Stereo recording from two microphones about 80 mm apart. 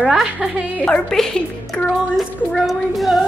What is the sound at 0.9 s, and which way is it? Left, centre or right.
A woman's voice, centre.